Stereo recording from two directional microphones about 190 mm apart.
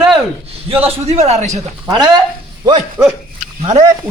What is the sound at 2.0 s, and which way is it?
Speech, 20° right (ahead or behind).